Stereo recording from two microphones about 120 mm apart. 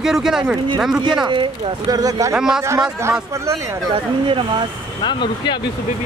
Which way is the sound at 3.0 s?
25° right (ahead or behind).